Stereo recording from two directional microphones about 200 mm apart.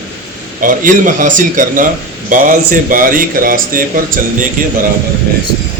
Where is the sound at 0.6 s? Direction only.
40° right (ahead or behind).